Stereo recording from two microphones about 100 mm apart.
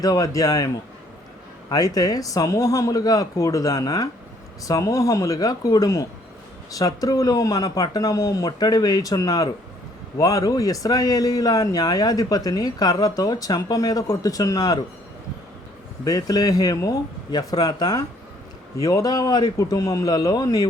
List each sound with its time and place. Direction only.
0.0 s speech: 35° left (ahead or behind)
1.7 s speech: 40° left (ahead or behind)
16.0 s speech: 40° left (ahead or behind)